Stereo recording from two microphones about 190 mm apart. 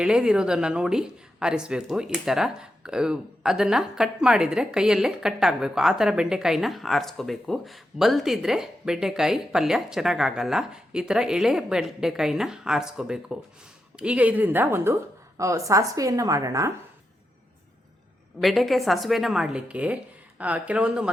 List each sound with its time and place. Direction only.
0.0 s a woman's voice: 5° right (ahead or behind)
18.3 s a woman's voice: centre (ahead or behind)